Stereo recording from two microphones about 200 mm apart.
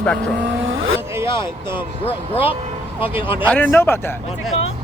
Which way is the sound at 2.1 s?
30° left (ahead or behind).